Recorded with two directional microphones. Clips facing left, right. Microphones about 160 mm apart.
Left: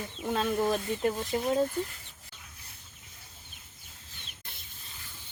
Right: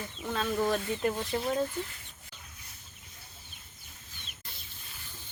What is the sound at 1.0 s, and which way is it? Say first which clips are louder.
Speech: left 2 dB; 5° left (ahead or behind).